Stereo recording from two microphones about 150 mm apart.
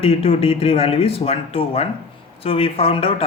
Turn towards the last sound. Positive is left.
turn(degrees=40)  # may be behind; listen again after turning